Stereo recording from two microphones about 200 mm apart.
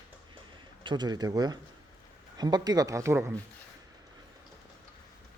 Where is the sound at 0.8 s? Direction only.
20° right (ahead or behind).